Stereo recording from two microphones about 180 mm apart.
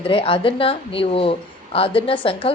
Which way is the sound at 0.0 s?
30° left (ahead or behind).